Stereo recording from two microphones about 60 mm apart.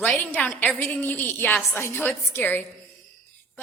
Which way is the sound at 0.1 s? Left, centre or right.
Left.